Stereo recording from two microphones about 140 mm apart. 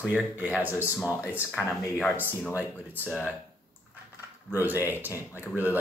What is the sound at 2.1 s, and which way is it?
Speech, 15° left (ahead or behind).